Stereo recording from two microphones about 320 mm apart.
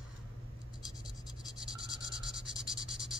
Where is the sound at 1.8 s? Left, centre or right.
Centre.